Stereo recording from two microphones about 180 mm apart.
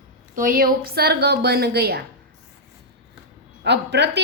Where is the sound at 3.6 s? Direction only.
70° right (ahead or behind).